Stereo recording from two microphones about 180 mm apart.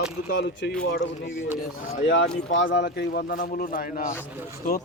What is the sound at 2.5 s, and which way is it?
A man's voice, 80° left.